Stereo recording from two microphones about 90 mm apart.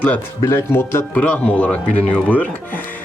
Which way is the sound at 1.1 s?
15° left (ahead or behind).